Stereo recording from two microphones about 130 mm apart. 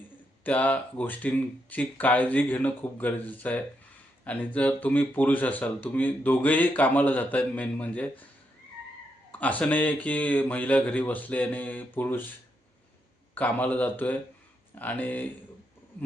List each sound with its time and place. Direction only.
0.4 s speech: 10° left (ahead or behind)
9.3 s speech: 10° left (ahead or behind)
13.3 s speech: 10° left (ahead or behind)